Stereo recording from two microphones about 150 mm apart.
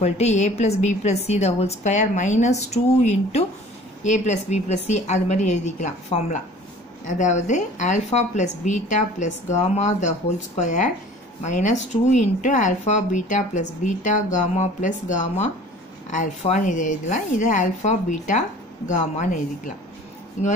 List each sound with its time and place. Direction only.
0.0 s speech: 50° left (ahead or behind)